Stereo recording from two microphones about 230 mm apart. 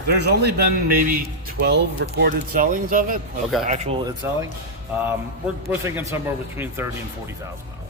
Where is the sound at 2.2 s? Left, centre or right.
Right.